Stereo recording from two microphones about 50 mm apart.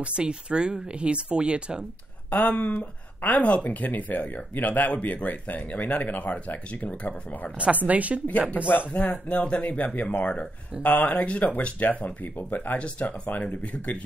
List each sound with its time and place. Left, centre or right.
0.0 s speech: centre
2.3 s speech: left
7.5 s speech: right
8.6 s speech: left
12.7 s speech: left